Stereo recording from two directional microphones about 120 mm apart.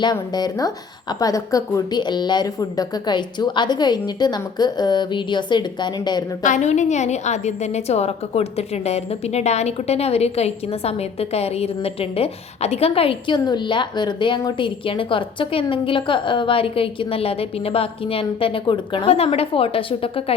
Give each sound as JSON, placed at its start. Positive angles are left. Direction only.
{"t": 0.0, "sound": "a woman's voice", "side_deg": 35}
{"t": 6.4, "sound": "a woman's voice", "side_deg": 85}